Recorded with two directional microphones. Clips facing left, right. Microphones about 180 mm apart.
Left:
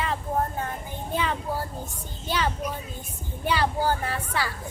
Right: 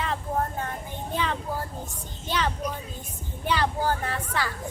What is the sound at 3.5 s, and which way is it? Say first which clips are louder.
Speech: left 1 dB; 5° left (ahead or behind).